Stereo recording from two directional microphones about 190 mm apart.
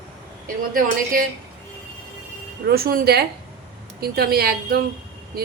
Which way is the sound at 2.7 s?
50° right (ahead or behind).